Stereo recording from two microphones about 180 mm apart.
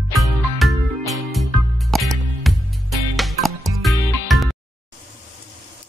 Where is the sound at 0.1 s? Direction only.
Centre (ahead or behind).